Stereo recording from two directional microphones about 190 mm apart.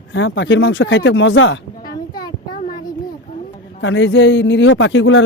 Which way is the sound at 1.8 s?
20° left (ahead or behind).